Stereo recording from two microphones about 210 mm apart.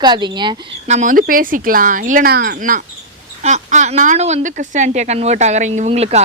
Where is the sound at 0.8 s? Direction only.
35° right (ahead or behind).